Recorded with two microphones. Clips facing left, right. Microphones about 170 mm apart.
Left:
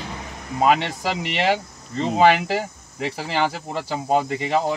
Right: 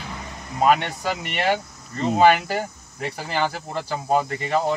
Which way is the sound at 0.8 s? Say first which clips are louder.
Left 2 dB; 25° left (ahead or behind).